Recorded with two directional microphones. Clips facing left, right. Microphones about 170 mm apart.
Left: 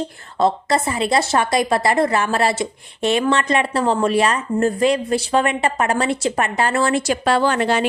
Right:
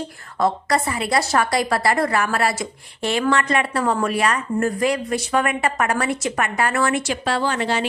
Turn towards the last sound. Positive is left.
turn(degrees=55)  # may be behind; listen again after turning